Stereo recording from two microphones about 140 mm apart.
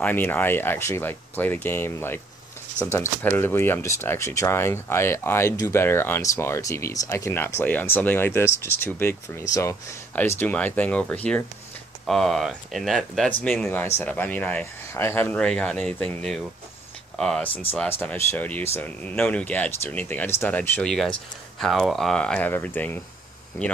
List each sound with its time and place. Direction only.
0.0 s speech: 15° left (ahead or behind)
13.7 s speech: 15° left (ahead or behind)